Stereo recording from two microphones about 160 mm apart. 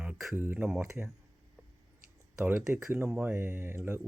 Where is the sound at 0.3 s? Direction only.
10° right (ahead or behind).